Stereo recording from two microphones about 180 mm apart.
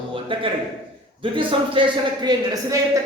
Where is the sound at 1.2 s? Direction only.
30° right (ahead or behind).